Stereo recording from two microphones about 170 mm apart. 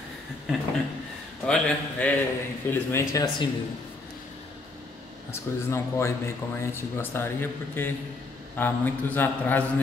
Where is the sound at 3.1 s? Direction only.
20° left (ahead or behind).